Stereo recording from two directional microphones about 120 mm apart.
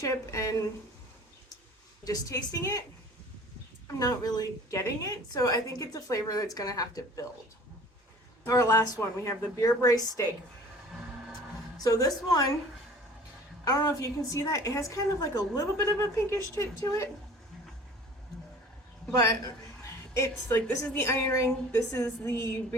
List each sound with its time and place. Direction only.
0.0 s a woman's voice: 25° left (ahead or behind)
2.0 s a woman's voice: 30° left (ahead or behind)
3.9 s a woman's voice: 30° left (ahead or behind)
8.4 s a woman's voice: 25° left (ahead or behind)
11.8 s a woman's voice: 30° left (ahead or behind)
13.7 s a woman's voice: 30° left (ahead or behind)
20.1 s a woman's voice: 20° left (ahead or behind)